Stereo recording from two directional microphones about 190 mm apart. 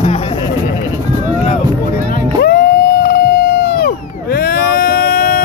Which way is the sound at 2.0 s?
55° left (ahead or behind).